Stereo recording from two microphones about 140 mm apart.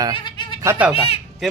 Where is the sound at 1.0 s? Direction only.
45° left (ahead or behind).